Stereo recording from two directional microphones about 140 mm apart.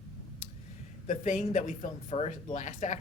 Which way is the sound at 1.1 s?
60° left (ahead or behind).